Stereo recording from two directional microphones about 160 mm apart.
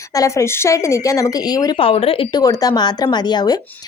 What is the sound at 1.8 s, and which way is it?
Speech, 35° left (ahead or behind).